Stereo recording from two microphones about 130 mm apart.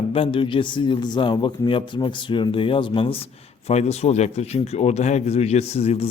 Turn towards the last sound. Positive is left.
turn(degrees=50)  # may be behind; listen again after turning